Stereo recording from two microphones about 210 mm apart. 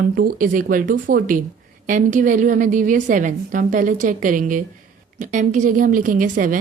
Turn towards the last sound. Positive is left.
turn(degrees=-40)  # may be behind; listen again after turning